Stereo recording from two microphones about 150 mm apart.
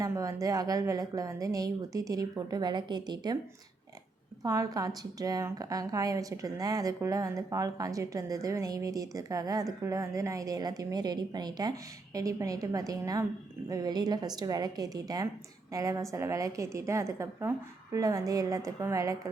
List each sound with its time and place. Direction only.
0.0 s a woman's voice: 20° right (ahead or behind)
4.4 s a woman's voice: 25° right (ahead or behind)